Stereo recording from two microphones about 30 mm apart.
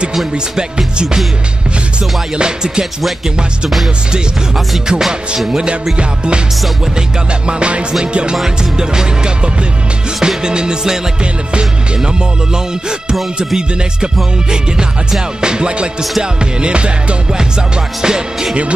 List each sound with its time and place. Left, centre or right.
2.3 s music: right
2.8 s speech: centre
5.9 s music: right
7.4 s music: right
14.5 s music: right
17.3 s music: right